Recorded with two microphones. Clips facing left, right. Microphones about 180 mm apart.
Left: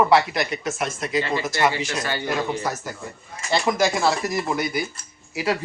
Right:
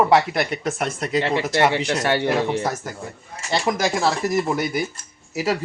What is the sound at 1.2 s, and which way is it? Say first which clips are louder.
Speech: right 3 dB; 70° right (ahead or behind).